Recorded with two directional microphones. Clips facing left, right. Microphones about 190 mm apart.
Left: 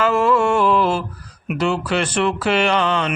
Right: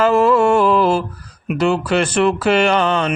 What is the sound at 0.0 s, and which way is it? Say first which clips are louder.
Mantra: right 4 dB; 40° right (ahead or behind).